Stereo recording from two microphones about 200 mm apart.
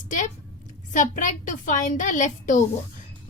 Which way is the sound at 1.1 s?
40° left (ahead or behind).